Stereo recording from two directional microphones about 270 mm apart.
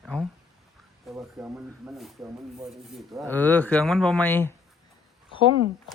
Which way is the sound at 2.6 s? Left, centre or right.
Centre.